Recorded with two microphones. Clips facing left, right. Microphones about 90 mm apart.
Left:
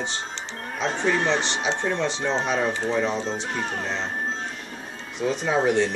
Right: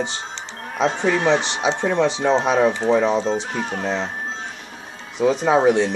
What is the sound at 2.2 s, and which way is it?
Speech, 65° right (ahead or behind).